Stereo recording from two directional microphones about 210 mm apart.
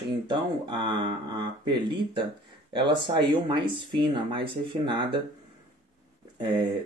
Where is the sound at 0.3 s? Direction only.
20° right (ahead or behind).